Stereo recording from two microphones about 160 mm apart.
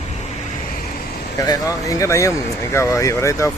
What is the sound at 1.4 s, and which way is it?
Speech, 20° left (ahead or behind).